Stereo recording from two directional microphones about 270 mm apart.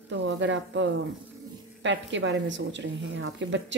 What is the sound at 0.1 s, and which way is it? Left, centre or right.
A woman's voice, right.